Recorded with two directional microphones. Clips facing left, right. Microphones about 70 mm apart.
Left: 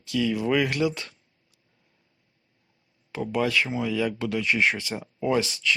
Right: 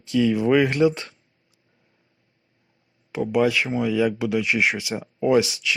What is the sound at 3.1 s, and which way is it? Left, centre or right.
Speech, centre.